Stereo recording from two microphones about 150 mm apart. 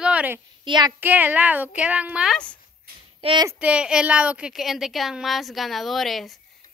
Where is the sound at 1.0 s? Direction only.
10° right (ahead or behind).